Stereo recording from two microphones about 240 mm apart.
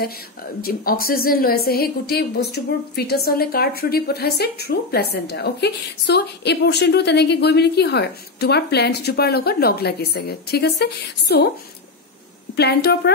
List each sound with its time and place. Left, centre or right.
0.6 s a woman's voice: left
12.5 s speech: left